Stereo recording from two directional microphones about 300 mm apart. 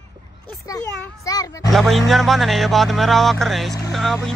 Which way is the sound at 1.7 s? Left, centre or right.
Centre.